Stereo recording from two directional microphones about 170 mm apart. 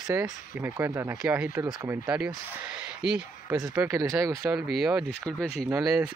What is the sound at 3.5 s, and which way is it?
Speech, 20° right (ahead or behind).